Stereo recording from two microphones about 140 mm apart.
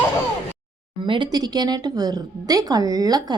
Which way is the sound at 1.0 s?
35° right (ahead or behind).